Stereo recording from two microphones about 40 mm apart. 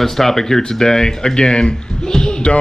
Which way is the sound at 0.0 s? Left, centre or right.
Centre.